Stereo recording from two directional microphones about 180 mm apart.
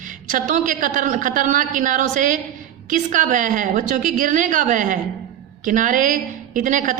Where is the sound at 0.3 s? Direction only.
45° right (ahead or behind).